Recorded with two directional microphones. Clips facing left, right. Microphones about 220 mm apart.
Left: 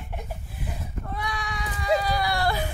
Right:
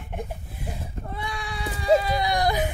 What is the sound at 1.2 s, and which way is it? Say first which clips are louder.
Sheep: even; 30° right (ahead or behind).